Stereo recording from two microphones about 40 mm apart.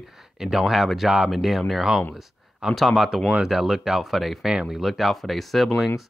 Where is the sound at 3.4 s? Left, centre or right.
Centre.